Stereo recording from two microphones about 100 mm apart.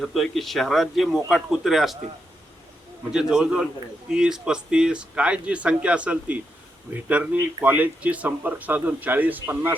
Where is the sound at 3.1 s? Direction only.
5° right (ahead or behind).